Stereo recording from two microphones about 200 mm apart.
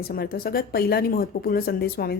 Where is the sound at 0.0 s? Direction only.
50° left (ahead or behind).